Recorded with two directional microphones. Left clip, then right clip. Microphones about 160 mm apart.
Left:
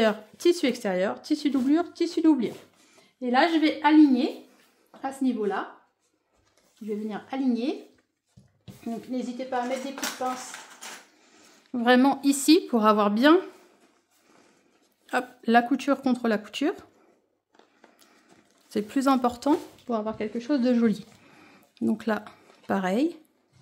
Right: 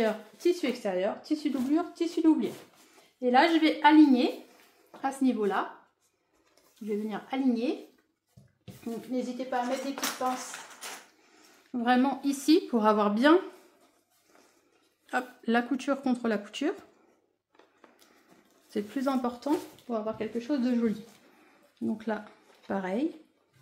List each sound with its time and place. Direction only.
0.0 s speech: 75° left (ahead or behind); by 2.5 s 60° left (ahead or behind)
3.2 s speech: 40° left (ahead or behind)
3.8 s a woman's voice: 20° left (ahead or behind)
7.1 s speech: 30° left (ahead or behind)
8.8 s speech: 45° left (ahead or behind)
11.7 s speech: 50° left (ahead or behind)
15.0 s speech: 40° left (ahead or behind)
18.7 s speech: 50° left (ahead or behind)